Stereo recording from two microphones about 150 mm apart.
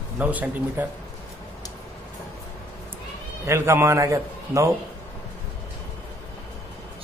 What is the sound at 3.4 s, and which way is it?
A man's voice, 15° right (ahead or behind).